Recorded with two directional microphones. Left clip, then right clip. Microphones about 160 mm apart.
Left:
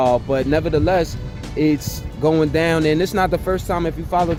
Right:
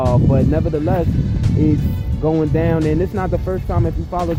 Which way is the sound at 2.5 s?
30° left (ahead or behind).